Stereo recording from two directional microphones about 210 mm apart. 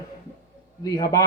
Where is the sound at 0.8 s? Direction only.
20° left (ahead or behind).